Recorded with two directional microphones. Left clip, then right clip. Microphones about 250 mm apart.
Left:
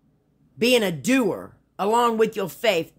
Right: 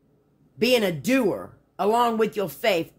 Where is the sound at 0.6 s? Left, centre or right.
Left.